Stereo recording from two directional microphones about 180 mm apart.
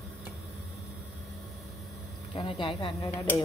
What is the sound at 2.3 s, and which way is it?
Speech, 25° left (ahead or behind).